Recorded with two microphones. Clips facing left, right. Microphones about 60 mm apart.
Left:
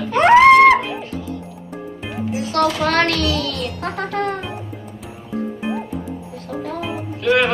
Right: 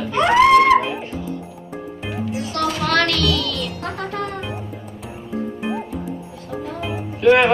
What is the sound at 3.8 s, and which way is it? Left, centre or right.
Speech, left.